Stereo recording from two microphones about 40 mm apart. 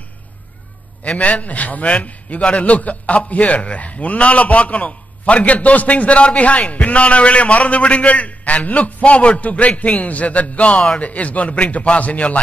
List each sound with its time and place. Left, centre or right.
1.0 s a man's voice: left